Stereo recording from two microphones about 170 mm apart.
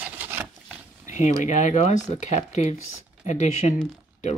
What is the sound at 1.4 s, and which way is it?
Speech, 45° left (ahead or behind).